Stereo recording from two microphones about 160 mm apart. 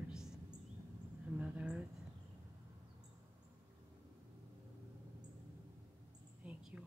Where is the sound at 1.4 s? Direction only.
10° right (ahead or behind).